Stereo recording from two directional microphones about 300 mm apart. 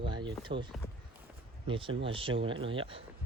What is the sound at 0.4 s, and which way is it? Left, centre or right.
Speech, centre.